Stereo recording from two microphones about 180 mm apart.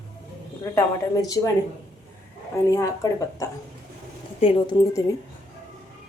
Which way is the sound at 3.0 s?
20° left (ahead or behind).